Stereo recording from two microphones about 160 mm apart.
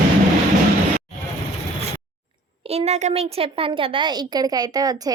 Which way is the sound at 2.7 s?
40° right (ahead or behind).